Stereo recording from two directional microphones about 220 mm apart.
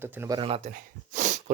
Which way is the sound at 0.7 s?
35° right (ahead or behind).